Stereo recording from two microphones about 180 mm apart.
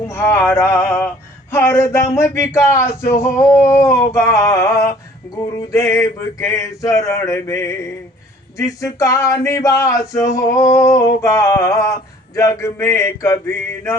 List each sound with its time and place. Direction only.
0.1 s male singing: 15° left (ahead or behind)